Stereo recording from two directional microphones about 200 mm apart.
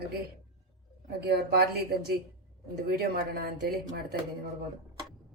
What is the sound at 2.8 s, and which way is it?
Speech, 50° right (ahead or behind).